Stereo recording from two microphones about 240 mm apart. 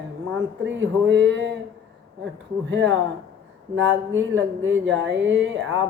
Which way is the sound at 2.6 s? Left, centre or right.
Right.